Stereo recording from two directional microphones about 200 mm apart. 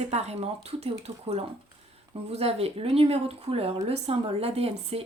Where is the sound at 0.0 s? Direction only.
30° right (ahead or behind).